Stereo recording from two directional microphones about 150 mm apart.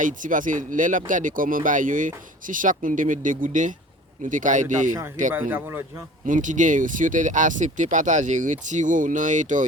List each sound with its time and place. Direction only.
0.0 s speech: 60° right (ahead or behind)
5.3 s a man's voice: 15° right (ahead or behind)
6.2 s speech: 60° right (ahead or behind)